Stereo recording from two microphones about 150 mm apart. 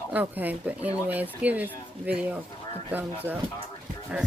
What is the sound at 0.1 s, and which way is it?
Speech, 10° right (ahead or behind).